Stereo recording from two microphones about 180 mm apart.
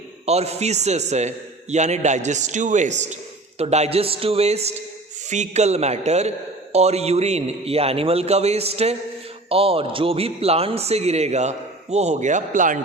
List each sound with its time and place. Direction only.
0.3 s a man's voice: 35° right (ahead or behind)